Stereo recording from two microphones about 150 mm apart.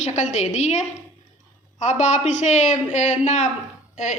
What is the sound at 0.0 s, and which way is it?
A woman's voice, 50° left (ahead or behind).